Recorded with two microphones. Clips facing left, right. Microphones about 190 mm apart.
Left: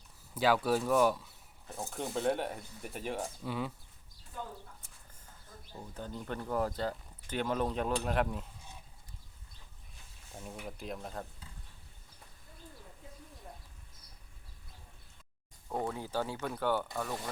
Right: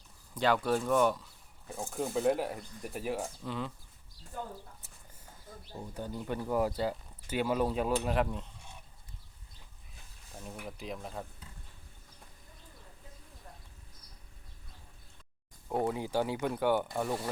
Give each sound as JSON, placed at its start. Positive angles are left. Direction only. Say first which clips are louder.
{"t": 0.3, "sound": "speech", "louder": "even", "side_deg": 5}
{"t": 1.6, "sound": "speech", "louder": "right 3 dB", "side_deg": -10}
{"t": 2.6, "sound": "speech", "louder": "right 3 dB", "side_deg": 5}
{"t": 2.9, "sound": "speech", "louder": "right 2 dB", "side_deg": -5}
{"t": 3.4, "sound": "speech", "louder": "left 1 dB", "side_deg": 5}
{"t": 5.9, "sound": "speech", "louder": "right 3 dB", "side_deg": -10}
{"t": 10.3, "sound": "speech", "louder": "even", "side_deg": 0}
{"t": 15.7, "sound": "speech", "louder": "right 4 dB", "side_deg": -15}
{"t": 16.9, "sound": "speech", "louder": "right 4 dB", "side_deg": -25}